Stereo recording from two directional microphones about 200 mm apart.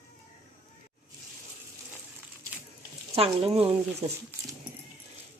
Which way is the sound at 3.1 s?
30° right (ahead or behind).